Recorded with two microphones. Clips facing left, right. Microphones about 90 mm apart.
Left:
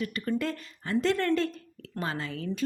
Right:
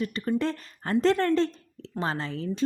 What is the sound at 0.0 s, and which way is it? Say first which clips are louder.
A woman's voice: right 3 dB; 30° right (ahead or behind).